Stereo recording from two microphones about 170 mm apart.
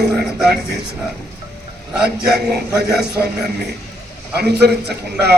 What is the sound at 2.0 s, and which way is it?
A man's voice, 70° right (ahead or behind).